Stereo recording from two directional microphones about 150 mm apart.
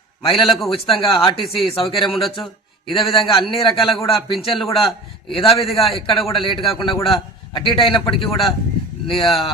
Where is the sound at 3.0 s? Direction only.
35° left (ahead or behind).